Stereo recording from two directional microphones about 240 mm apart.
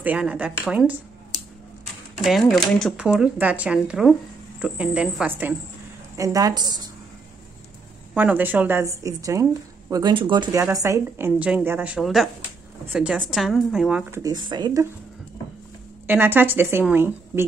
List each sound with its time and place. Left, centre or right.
0.0 s speech: centre
2.1 s a woman's voice: centre
8.1 s a woman's voice: centre
14.2 s a woman's voice: centre
16.1 s a woman's voice: centre